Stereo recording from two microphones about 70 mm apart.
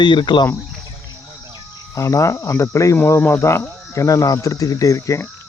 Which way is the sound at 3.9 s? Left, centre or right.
Left.